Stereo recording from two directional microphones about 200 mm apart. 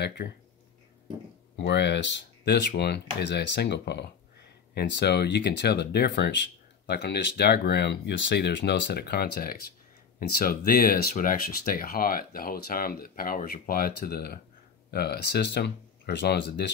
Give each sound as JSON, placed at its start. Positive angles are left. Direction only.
{"t": 0.0, "sound": "speech", "side_deg": 55}
{"t": 1.6, "sound": "speech", "side_deg": 60}